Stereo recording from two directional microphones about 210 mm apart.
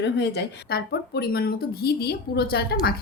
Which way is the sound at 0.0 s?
55° left (ahead or behind).